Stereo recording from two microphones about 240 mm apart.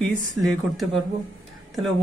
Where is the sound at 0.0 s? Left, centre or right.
Centre.